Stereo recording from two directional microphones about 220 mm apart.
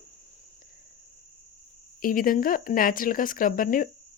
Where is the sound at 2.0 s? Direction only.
40° left (ahead or behind).